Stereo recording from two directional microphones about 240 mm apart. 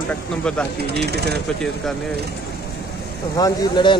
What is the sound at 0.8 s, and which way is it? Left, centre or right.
Speech, right.